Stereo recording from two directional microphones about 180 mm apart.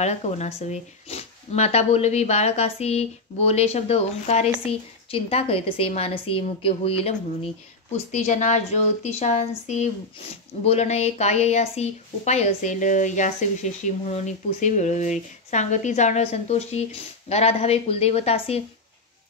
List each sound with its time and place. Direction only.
0.0 s speech: 40° left (ahead or behind)